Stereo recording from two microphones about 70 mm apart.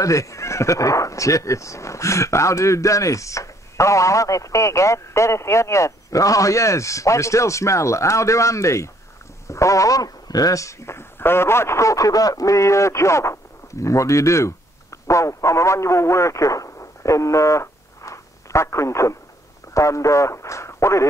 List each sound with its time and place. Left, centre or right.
0.0 s speech: left